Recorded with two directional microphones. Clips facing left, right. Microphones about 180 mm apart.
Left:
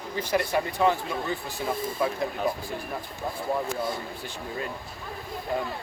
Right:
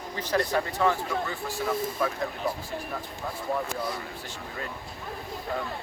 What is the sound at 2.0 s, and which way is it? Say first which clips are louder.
Speech: left 3 dB; 20° left (ahead or behind).